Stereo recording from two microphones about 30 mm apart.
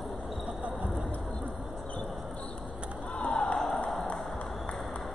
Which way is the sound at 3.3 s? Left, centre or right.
Left.